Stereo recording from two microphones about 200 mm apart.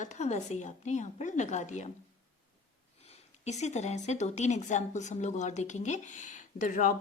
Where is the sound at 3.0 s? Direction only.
35° left (ahead or behind).